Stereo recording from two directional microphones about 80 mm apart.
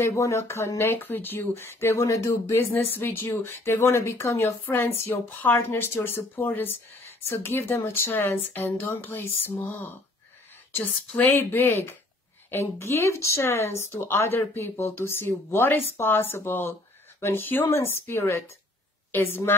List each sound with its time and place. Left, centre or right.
0.0 s speech: left
2.6 s speech: left